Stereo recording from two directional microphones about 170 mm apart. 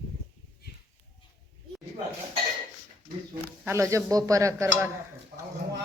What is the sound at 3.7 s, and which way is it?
Speech, 15° right (ahead or behind).